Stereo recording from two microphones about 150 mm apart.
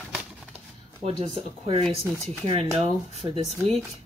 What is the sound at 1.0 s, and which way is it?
Speech, 40° right (ahead or behind).